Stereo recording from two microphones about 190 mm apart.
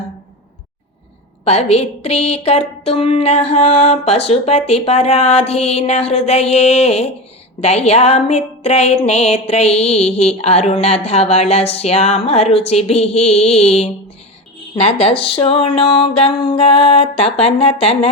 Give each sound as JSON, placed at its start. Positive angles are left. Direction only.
{"t": 1.5, "sound": "music", "side_deg": 35}